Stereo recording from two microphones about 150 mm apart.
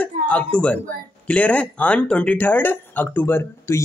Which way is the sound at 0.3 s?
10° left (ahead or behind).